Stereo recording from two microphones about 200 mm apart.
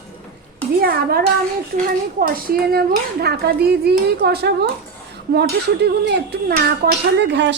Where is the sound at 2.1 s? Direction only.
45° right (ahead or behind).